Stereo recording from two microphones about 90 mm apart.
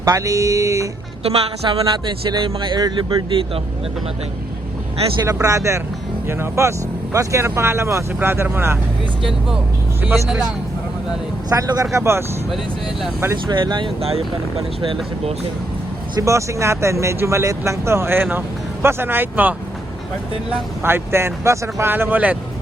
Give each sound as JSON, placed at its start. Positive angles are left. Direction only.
{"t": 0.0, "sound": "speech", "side_deg": -40}
{"t": 1.2, "sound": "a woman's voice", "side_deg": -90}
{"t": 2.4, "sound": "speech", "side_deg": -75}
{"t": 2.7, "sound": "speech", "side_deg": -55}
{"t": 5.2, "sound": "speech", "side_deg": -35}
{"t": 10.2, "sound": "a man's voice", "side_deg": -10}
{"t": 11.4, "sound": "speech", "side_deg": -45}
{"t": 13.5, "sound": "speech", "side_deg": -60}
{"t": 16.1, "sound": "speech", "side_deg": -35}
{"t": 20.8, "sound": "speech", "side_deg": -25}